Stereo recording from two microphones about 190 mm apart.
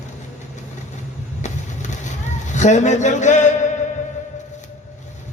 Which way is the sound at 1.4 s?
40° left (ahead or behind).